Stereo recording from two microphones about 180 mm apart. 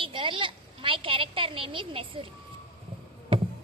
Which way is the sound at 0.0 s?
30° right (ahead or behind).